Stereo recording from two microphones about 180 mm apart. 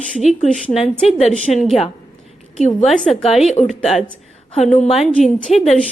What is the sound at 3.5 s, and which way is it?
Speech, 40° left (ahead or behind).